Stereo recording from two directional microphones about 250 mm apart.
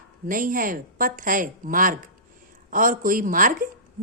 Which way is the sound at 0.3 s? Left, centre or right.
Right.